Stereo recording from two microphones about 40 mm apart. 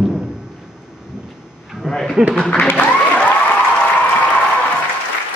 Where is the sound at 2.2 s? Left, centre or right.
Right.